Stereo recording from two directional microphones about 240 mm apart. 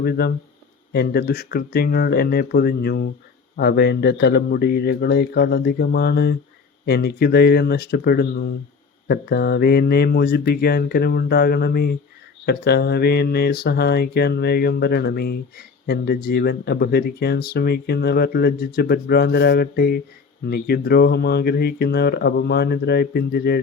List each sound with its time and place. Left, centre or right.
0.0 s mantra: left
3.6 s speech: left
6.8 s mantra: left